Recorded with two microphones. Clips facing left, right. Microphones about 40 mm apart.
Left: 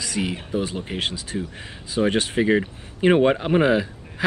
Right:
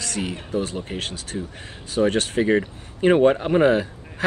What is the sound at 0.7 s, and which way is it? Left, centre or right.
Speech, left.